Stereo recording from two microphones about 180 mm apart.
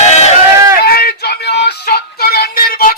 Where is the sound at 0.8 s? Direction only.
60° left (ahead or behind).